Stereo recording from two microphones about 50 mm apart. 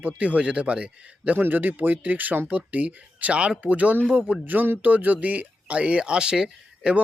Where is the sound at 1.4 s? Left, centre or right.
Right; by 6.9 s centre.